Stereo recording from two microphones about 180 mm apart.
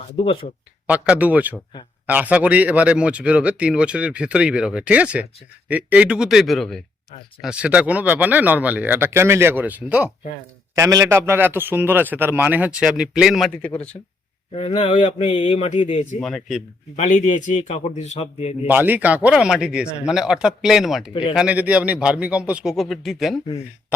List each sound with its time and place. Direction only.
0.9 s a man's voice: 5° right (ahead or behind)
14.5 s a man's voice: 35° left (ahead or behind)
16.2 s speech: centre (ahead or behind)
17.0 s a man's voice: 45° left (ahead or behind)
18.7 s speech: 10° right (ahead or behind)